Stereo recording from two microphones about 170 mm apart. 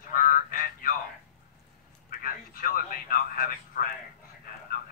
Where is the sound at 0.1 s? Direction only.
55° left (ahead or behind).